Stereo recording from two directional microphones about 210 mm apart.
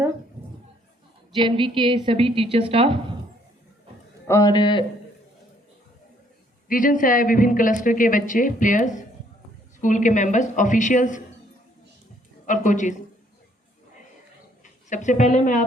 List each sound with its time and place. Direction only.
1.4 s a woman's voice: 25° right (ahead or behind)
4.3 s a man's voice: 15° left (ahead or behind)
6.7 s a woman's voice: 40° left (ahead or behind)
12.5 s a woman's voice: 35° left (ahead or behind)
14.6 s speech: 35° left (ahead or behind)